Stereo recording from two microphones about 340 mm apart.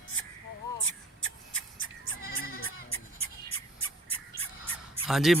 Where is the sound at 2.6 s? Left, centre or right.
Left.